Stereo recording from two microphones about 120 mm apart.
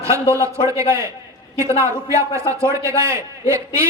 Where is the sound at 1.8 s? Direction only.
25° right (ahead or behind).